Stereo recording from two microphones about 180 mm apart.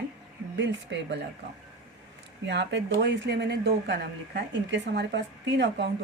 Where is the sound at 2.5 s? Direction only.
75° right (ahead or behind).